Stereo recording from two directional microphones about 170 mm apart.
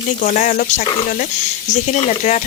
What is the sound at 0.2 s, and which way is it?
Speech, 50° left (ahead or behind).